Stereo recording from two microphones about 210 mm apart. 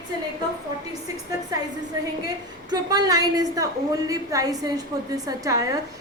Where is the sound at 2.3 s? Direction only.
20° right (ahead or behind).